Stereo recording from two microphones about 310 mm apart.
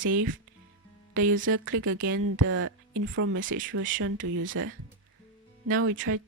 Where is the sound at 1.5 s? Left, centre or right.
Right.